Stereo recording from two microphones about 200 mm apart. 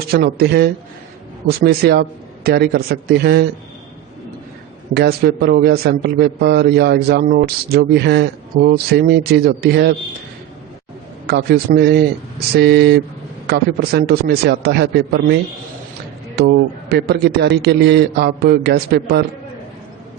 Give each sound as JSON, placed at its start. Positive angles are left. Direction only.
{"t": 0.1, "sound": "a man's voice", "side_deg": -50}
{"t": 4.9, "sound": "a man's voice", "side_deg": -55}
{"t": 11.3, "sound": "a man's voice", "side_deg": -50}
{"t": 16.9, "sound": "a man's voice", "side_deg": -55}